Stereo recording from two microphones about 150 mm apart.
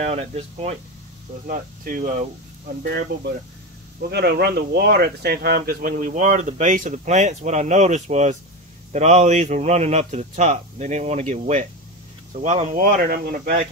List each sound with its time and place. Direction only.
0.0 s speech: 45° right (ahead or behind)
1.5 s speech: 60° right (ahead or behind)
4.1 s speech: 90° right; by 12.6 s 45° right (ahead or behind)
12.7 s speech: 65° right (ahead or behind)